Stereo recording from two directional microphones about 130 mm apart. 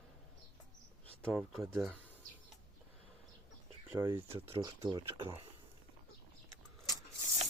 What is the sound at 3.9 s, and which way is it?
Speech, 20° right (ahead or behind).